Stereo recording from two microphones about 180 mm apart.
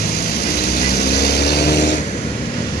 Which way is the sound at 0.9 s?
65° left (ahead or behind).